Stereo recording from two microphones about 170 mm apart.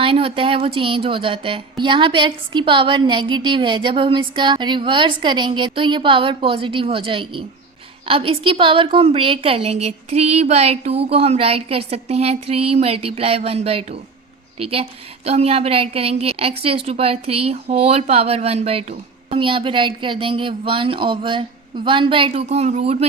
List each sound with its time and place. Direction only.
0.0 s a woman's voice: 35° right (ahead or behind)